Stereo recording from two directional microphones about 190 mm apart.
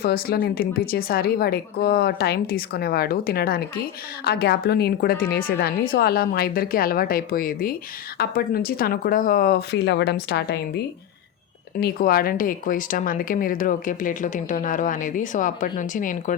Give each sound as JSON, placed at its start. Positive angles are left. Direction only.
{"t": 0.0, "sound": "speech", "side_deg": 55}
{"t": 11.8, "sound": "speech", "side_deg": 50}